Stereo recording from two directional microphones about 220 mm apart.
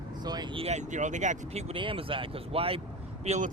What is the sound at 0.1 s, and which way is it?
Speech, 20° right (ahead or behind).